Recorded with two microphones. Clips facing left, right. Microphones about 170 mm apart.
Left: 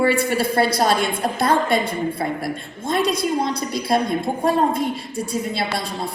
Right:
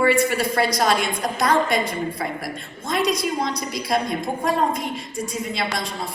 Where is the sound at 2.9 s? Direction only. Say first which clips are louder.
Left 2 dB; 30° left (ahead or behind).